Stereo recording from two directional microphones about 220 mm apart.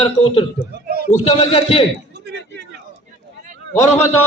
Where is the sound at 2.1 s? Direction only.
50° right (ahead or behind).